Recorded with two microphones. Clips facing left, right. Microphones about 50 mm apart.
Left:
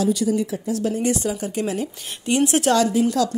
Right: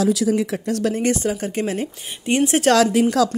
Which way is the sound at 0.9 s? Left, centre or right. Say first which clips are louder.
Right 2 dB; right.